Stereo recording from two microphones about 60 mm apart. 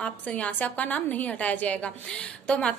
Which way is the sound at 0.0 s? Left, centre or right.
Left.